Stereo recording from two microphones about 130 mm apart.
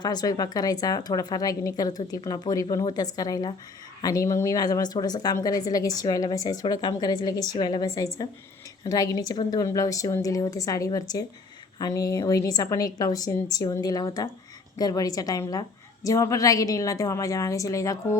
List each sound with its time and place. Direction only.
0.0 s a woman's voice: 30° left (ahead or behind)